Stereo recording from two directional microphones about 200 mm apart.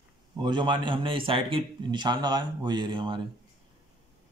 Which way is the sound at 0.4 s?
25° right (ahead or behind).